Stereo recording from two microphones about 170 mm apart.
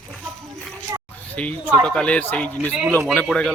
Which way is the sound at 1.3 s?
10° left (ahead or behind).